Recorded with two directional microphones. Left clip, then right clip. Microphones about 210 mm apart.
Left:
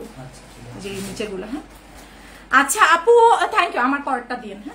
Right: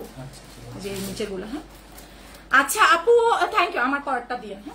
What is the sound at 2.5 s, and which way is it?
A woman's voice, 20° left (ahead or behind).